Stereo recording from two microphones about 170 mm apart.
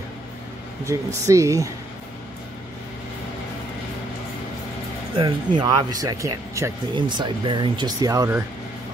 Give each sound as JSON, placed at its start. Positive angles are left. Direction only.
{"t": 0.8, "sound": "speech", "side_deg": -20}
{"t": 5.1, "sound": "speech", "side_deg": -30}